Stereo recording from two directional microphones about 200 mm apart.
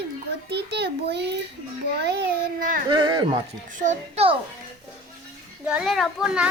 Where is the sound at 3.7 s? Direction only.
40° right (ahead or behind).